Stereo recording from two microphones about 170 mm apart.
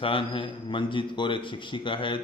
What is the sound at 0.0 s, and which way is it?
A man's voice, 30° left (ahead or behind).